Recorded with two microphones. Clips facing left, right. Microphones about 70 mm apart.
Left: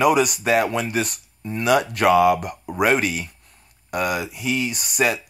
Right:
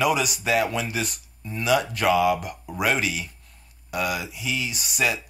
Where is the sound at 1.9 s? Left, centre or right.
Left.